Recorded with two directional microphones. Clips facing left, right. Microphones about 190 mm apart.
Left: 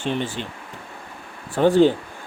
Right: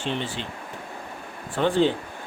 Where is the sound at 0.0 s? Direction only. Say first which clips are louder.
Left 4 dB; 50° left (ahead or behind).